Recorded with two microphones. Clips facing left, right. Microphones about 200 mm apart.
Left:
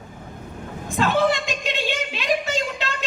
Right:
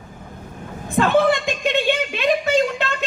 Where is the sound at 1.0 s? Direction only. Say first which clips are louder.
Right 4 dB; 55° right (ahead or behind).